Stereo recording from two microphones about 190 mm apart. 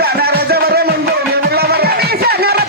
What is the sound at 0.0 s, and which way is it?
Music, 55° right (ahead or behind).